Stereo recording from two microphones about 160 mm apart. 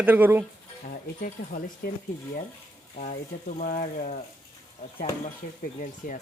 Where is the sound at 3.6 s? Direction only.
60° left (ahead or behind).